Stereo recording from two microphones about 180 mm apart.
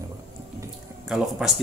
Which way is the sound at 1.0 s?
Centre (ahead or behind).